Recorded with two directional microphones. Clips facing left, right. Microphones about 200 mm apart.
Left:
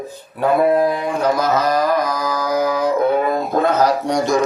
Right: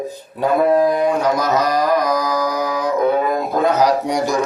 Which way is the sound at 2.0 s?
15° right (ahead or behind).